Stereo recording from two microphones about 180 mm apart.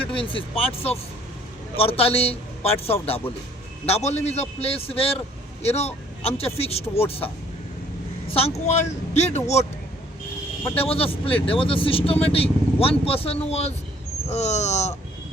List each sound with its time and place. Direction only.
0.0 s speech: 30° left (ahead or behind)
8.3 s speech: 35° left (ahead or behind)
10.8 s speech: 35° left (ahead or behind)